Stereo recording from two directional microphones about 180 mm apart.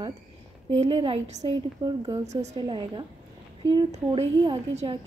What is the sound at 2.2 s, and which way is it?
Speech, 40° right (ahead or behind).